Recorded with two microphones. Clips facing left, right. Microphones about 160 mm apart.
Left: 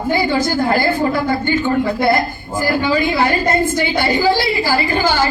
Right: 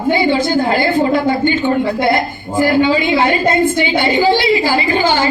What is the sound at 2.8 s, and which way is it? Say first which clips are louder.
A woman's voice: right 1 dB; 20° right (ahead or behind).